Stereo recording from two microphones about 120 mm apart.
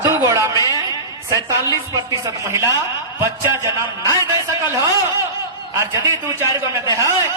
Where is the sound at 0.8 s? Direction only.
30° right (ahead or behind).